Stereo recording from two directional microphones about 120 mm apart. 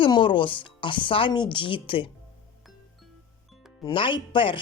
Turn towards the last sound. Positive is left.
turn(degrees=45)  # may be behind; listen again after turning